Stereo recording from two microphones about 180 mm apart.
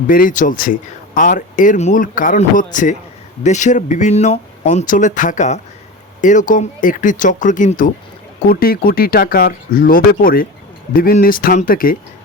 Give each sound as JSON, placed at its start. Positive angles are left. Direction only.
{"t": 0.1, "sound": "speech", "side_deg": 50}